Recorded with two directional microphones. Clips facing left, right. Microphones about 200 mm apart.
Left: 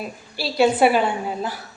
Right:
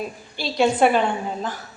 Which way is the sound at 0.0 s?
5° left (ahead or behind).